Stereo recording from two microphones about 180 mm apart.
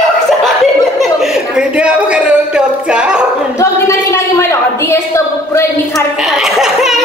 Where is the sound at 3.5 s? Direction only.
15° left (ahead or behind).